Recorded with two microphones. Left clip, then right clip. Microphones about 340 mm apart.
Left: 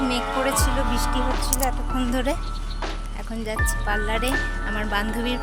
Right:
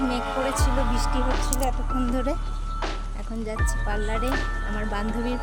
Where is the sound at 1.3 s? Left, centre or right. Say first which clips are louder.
Left 2 dB; centre.